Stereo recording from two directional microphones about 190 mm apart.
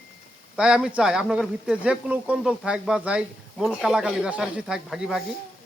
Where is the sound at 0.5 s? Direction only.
5° right (ahead or behind).